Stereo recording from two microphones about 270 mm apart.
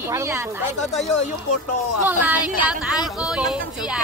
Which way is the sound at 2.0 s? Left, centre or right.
Centre.